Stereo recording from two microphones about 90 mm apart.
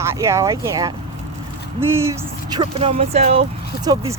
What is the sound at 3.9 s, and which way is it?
Speech, 55° right (ahead or behind).